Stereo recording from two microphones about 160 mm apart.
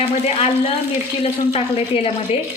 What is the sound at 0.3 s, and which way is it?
A woman's voice, 35° left (ahead or behind).